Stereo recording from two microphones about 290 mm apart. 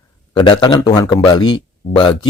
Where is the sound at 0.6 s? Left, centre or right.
Centre.